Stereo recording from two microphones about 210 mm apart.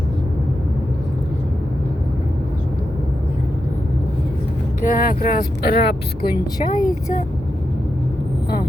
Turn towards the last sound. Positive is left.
turn(degrees=45)  # may be behind; listen again after turning